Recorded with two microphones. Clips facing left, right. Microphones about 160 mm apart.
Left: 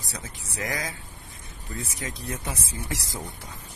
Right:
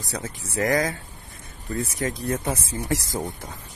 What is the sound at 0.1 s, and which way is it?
Speech, 50° right (ahead or behind).